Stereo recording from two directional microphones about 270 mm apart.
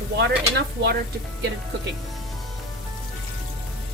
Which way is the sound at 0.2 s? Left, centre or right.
Right.